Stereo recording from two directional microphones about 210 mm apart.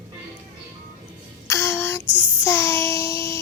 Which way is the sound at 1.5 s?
10° left (ahead or behind).